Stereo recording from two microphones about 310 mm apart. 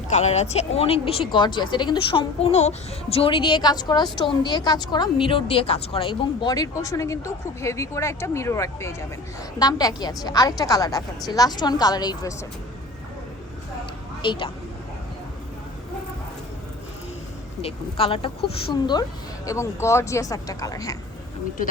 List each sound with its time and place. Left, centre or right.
0.1 s a woman's voice: left
14.2 s speech: centre
17.6 s a woman's voice: centre